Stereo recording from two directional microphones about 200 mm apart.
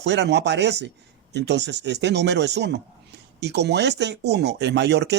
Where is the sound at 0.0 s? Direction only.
60° right (ahead or behind).